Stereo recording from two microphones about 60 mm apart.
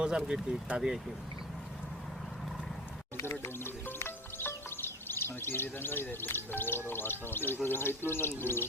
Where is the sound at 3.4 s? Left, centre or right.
Left.